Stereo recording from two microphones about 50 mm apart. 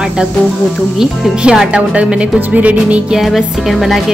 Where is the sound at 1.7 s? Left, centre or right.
Right.